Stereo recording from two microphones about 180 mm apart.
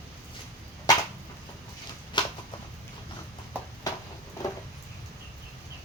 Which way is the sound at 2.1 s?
25° left (ahead or behind).